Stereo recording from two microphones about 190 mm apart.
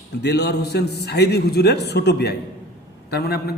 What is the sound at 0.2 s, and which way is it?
A man's voice, 60° left (ahead or behind).